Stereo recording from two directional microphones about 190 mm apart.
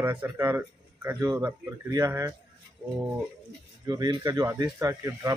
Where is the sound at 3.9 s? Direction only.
20° right (ahead or behind).